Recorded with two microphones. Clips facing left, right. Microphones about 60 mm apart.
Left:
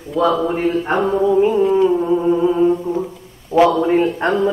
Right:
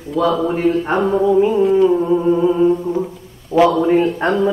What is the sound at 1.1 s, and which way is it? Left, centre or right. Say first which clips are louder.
Speech: right 1 dB; centre.